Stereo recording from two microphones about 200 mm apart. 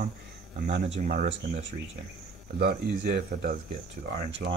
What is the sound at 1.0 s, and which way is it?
Speech, 40° right (ahead or behind).